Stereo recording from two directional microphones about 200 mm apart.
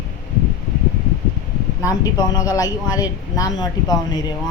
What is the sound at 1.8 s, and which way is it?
A man's voice, 20° left (ahead or behind).